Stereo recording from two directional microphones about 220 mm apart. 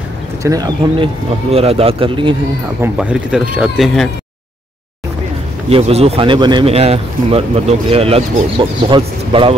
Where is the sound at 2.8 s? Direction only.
5° right (ahead or behind).